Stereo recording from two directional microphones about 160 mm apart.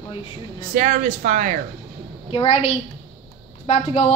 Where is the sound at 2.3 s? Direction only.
35° left (ahead or behind).